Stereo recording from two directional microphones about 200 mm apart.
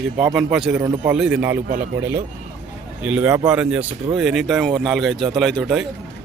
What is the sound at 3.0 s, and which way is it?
Speech, 5° right (ahead or behind).